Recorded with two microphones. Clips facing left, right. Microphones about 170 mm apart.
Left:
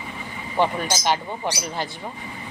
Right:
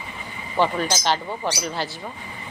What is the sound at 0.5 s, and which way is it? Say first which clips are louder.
Speech: right 1 dB; 15° left (ahead or behind).